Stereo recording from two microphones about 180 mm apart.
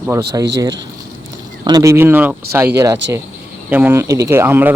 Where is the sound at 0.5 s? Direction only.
20° right (ahead or behind).